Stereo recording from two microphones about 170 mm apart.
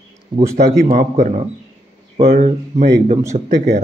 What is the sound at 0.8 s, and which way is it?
Speech, 50° right (ahead or behind).